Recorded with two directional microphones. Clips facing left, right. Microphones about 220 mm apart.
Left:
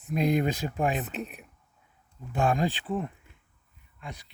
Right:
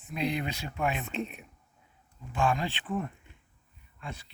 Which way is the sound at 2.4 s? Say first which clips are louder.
Left 3 dB; 45° left (ahead or behind).